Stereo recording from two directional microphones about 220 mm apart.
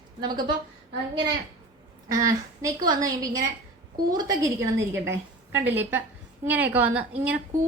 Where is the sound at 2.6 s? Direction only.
15° right (ahead or behind).